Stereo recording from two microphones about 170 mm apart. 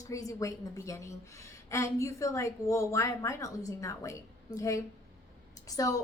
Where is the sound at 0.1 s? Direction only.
20° left (ahead or behind).